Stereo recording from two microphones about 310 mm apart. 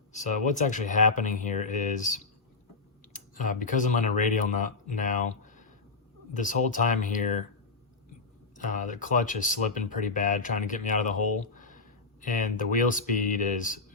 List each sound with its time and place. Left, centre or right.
0.1 s speech: left
8.5 s speech: left